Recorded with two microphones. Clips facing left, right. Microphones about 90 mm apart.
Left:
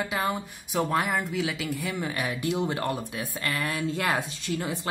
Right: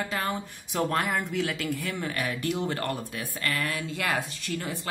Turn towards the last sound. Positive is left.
turn(degrees=20)  # may be behind; listen again after turning